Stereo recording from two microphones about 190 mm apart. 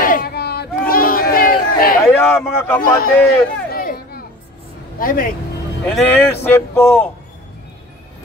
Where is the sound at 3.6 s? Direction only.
50° left (ahead or behind).